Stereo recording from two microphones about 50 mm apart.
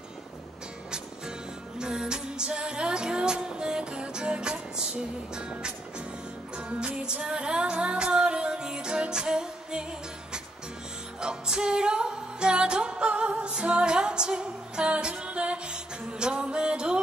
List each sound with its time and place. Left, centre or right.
1.8 s music: centre
11.1 s music: centre